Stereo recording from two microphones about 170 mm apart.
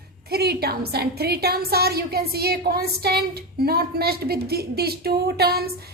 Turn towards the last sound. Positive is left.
turn(degrees=-65)  # may be behind; listen again after turning